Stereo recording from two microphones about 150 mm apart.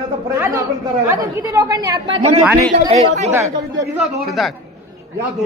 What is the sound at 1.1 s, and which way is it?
A man's voice, 20° right (ahead or behind).